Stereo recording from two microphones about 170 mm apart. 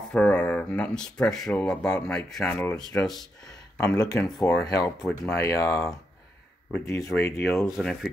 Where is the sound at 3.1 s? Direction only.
25° left (ahead or behind).